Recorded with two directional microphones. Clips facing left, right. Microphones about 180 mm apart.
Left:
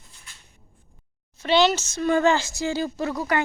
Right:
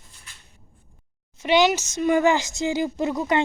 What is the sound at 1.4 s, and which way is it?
Speech, 15° right (ahead or behind).